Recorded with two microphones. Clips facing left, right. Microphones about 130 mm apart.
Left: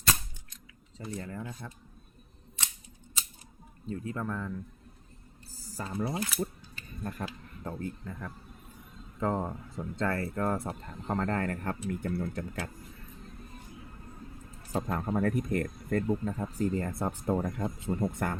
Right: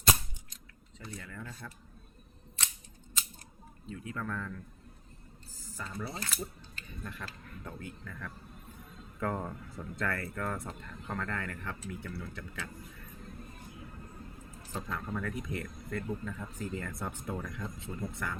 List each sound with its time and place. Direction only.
1.1 s speech: 30° left (ahead or behind)
1.5 s speech: 15° left (ahead or behind)
3.8 s speech: 35° left (ahead or behind); by 4.6 s 20° left (ahead or behind)
5.5 s typing: 35° left (ahead or behind)
6.1 s speech: 10° left (ahead or behind)
7.0 s speech: 40° left (ahead or behind)
14.7 s speech: 45° left (ahead or behind)